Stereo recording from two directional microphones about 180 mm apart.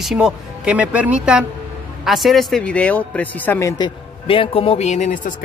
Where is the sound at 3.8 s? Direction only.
30° left (ahead or behind).